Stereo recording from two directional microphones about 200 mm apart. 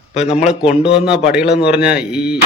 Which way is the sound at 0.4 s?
5° right (ahead or behind).